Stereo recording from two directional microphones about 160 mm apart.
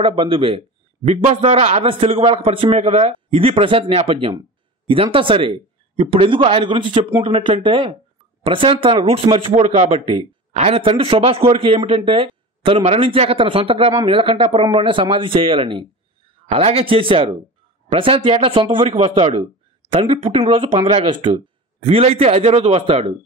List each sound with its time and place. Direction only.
0.0 s speech: 35° right (ahead or behind)